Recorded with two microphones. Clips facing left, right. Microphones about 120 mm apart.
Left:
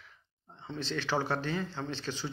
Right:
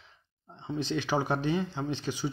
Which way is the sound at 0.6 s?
15° right (ahead or behind).